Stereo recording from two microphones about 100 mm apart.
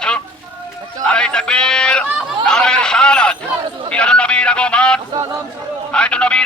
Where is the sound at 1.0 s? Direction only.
10° left (ahead or behind).